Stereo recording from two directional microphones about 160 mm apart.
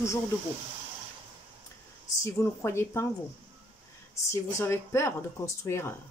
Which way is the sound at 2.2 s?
15° left (ahead or behind).